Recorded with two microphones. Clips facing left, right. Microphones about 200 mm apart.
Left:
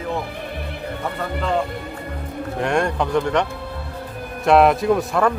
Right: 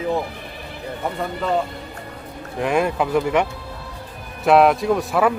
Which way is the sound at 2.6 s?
5° right (ahead or behind).